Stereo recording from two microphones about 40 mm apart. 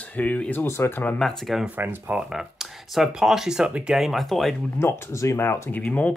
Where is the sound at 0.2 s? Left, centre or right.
Left.